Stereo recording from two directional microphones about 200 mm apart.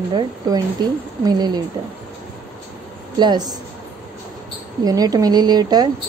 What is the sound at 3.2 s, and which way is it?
Speech, 20° right (ahead or behind).